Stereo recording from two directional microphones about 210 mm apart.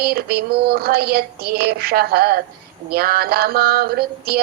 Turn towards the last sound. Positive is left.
turn(degrees=-45)  # may be behind; listen again after turning